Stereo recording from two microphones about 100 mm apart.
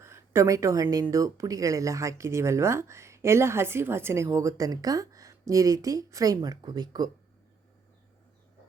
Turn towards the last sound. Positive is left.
turn(degrees=-40)  # may be behind; listen again after turning